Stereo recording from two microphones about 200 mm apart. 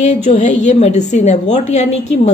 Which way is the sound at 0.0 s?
35° left (ahead or behind).